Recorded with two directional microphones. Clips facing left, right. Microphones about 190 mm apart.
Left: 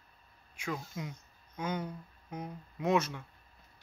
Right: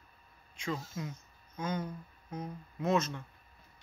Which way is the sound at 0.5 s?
10° left (ahead or behind).